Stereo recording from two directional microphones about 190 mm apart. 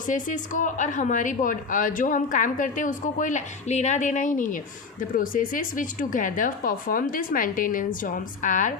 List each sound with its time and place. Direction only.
0.1 s speech: 40° left (ahead or behind)